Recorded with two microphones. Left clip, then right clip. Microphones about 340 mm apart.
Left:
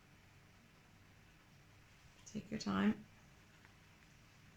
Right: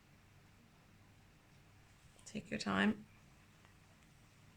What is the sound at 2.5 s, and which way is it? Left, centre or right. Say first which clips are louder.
Speech: right 3 dB; right.